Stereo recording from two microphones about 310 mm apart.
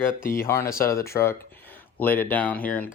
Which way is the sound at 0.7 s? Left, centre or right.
Left.